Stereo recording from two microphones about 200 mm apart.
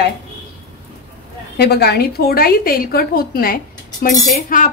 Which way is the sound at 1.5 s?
55° left (ahead or behind).